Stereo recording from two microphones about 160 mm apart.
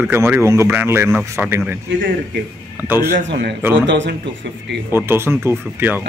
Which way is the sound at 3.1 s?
85° right.